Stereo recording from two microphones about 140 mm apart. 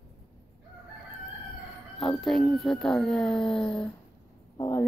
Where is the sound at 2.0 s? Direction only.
Centre (ahead or behind).